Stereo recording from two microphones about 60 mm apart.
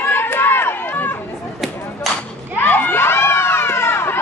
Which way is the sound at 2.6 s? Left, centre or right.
Left.